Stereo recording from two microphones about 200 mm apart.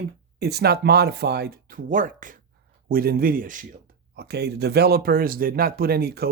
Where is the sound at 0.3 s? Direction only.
55° right (ahead or behind).